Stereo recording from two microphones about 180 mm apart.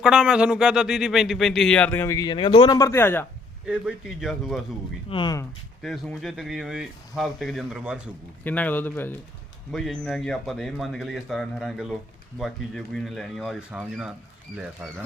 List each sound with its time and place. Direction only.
0.0 s speech: 5° right (ahead or behind); by 3.2 s 10° left (ahead or behind)
3.7 s speech: 5° right (ahead or behind)
5.0 s speech: 25° left (ahead or behind)
5.8 s speech: centre (ahead or behind)
8.4 s speech: 10° left (ahead or behind)